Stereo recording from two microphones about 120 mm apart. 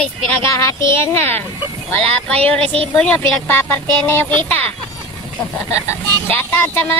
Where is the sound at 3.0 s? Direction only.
15° left (ahead or behind).